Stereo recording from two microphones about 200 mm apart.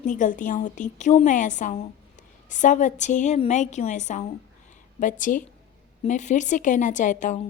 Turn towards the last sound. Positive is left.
turn(degrees=40)  # may be behind; listen again after turning